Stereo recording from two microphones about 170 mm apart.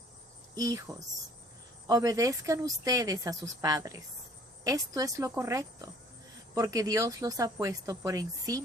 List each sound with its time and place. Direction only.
0.5 s a woman's voice: 20° right (ahead or behind)